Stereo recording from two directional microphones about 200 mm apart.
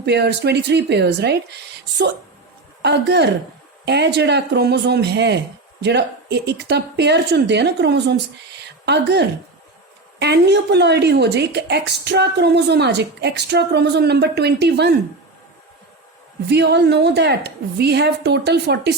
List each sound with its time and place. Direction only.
0.0 s speech: 55° right (ahead or behind)
2.8 s speech: 60° right (ahead or behind)
16.5 s speech: 55° right (ahead or behind)